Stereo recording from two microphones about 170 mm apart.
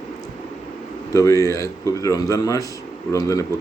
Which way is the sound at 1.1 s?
15° left (ahead or behind).